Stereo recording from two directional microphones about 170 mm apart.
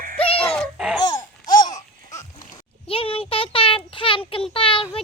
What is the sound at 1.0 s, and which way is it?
Babbling, 25° left (ahead or behind).